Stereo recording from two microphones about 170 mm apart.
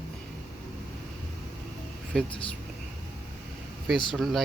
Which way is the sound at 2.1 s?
5° left (ahead or behind).